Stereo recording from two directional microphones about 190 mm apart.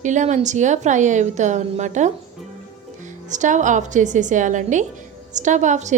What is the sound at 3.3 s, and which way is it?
A woman's voice, 40° right (ahead or behind).